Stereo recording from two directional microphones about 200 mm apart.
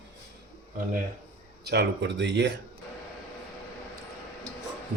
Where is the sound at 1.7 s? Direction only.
60° right (ahead or behind).